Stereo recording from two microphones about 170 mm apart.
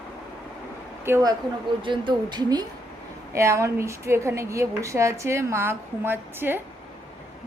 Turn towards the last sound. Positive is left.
turn(degrees=-10)  # may be behind; listen again after turning